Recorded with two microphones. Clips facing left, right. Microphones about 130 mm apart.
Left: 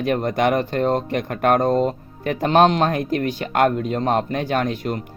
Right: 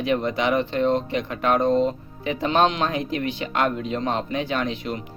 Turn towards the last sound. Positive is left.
turn(degrees=45)  # may be behind; listen again after turning